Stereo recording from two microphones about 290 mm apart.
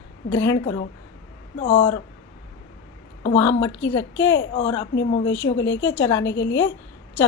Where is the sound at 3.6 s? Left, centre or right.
Left.